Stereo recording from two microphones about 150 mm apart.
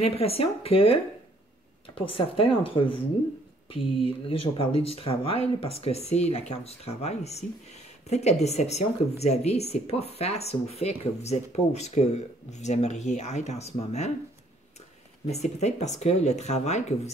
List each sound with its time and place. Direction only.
0.0 s speech: 40° left (ahead or behind)
2.0 s speech: 35° left (ahead or behind)
4.0 s speech: 40° left (ahead or behind)
15.2 s speech: 45° left (ahead or behind)